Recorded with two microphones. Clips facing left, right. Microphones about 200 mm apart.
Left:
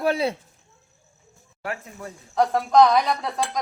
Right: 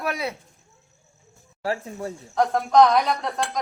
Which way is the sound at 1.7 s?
30° right (ahead or behind).